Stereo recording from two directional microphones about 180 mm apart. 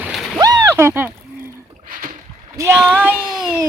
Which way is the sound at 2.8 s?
5° right (ahead or behind).